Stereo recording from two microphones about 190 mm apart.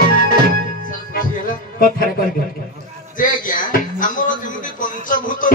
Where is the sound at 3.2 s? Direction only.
45° left (ahead or behind).